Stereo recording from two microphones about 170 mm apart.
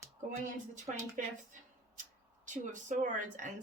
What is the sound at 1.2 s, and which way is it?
Speech, 50° right (ahead or behind).